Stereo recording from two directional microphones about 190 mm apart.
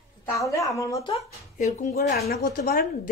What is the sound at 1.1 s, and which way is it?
A woman's voice, 35° left (ahead or behind).